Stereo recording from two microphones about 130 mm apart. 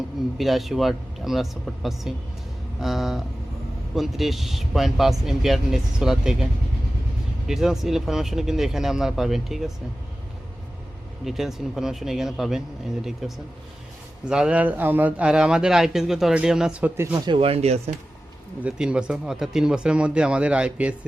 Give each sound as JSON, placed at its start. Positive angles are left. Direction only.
{"t": 0.3, "sound": "a man's voice", "side_deg": 0}
{"t": 11.3, "sound": "a man's voice", "side_deg": 0}
{"t": 17.2, "sound": "speech", "side_deg": -45}
{"t": 18.6, "sound": "speech", "side_deg": -5}